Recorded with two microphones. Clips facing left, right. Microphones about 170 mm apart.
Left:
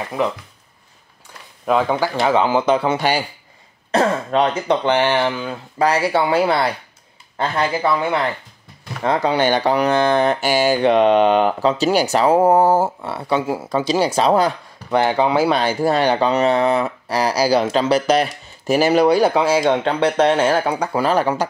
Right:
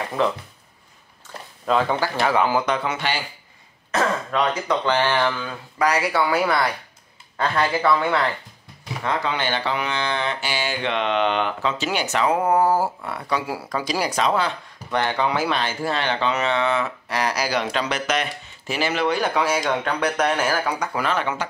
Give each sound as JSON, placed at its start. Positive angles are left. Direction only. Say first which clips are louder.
{"t": 0.2, "sound": "speech", "louder": "left 1 dB", "side_deg": 15}
{"t": 1.7, "sound": "speech", "louder": "left 3 dB", "side_deg": 15}
{"t": 9.0, "sound": "speech", "louder": "left 8 dB", "side_deg": 35}